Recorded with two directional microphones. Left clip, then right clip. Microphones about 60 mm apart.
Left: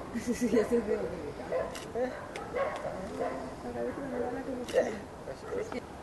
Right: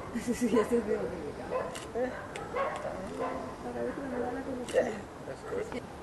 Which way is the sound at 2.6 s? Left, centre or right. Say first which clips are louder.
Even; right.